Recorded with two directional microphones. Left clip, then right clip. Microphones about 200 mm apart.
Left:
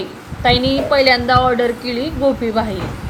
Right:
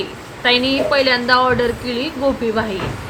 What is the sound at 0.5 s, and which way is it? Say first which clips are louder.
Speech: even; 20° right (ahead or behind).